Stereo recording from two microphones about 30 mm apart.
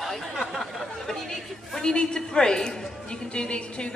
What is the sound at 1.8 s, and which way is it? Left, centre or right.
A woman's voice, left.